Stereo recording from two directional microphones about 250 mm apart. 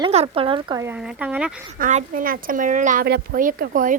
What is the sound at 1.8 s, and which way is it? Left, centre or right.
Speech, right.